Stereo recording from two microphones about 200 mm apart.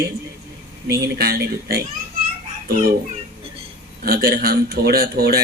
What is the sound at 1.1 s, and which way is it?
Speech, 50° right (ahead or behind).